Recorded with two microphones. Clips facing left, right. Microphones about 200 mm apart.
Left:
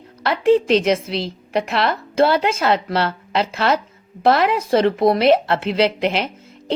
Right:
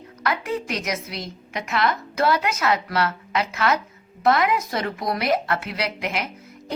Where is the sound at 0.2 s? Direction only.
30° left (ahead or behind).